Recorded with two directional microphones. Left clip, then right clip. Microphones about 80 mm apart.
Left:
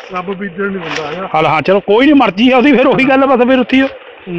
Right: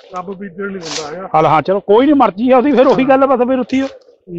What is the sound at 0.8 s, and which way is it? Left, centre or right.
Speech, right.